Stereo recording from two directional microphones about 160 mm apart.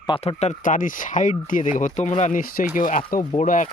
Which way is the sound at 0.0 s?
35° left (ahead or behind).